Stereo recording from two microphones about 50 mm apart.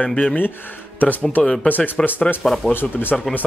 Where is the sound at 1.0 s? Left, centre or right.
Left.